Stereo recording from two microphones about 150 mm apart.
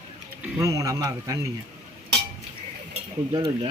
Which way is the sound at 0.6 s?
20° right (ahead or behind).